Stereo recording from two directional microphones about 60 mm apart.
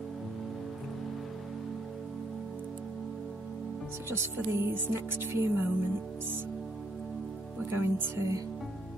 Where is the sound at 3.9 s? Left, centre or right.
Right.